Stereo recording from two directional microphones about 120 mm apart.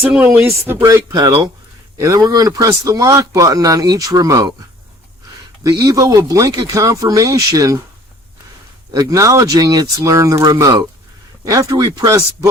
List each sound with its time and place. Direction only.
0.0 s speech: 10° right (ahead or behind)
0.9 s speech: 30° right (ahead or behind)
5.6 s speech: 30° right (ahead or behind)
8.9 s speech: 30° right (ahead or behind)